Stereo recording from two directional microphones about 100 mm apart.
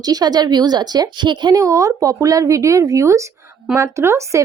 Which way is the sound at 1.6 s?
35° right (ahead or behind).